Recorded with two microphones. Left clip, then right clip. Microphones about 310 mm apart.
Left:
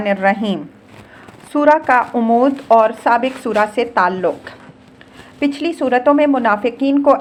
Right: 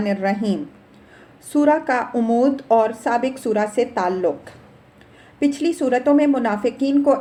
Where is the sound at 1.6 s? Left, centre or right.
Centre.